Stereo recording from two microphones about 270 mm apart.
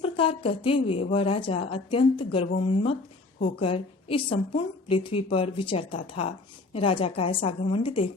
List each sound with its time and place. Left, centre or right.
0.0 s a woman's voice: centre